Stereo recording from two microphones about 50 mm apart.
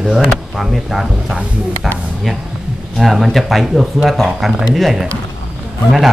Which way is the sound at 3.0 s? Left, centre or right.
Centre.